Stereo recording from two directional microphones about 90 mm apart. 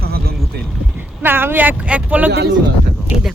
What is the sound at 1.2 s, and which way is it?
Speech, 25° right (ahead or behind).